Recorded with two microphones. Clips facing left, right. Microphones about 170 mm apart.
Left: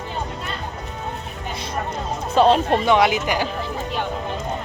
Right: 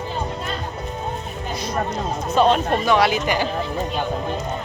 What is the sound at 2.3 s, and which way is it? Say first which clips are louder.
Speech: left 2 dB; 30° left (ahead or behind).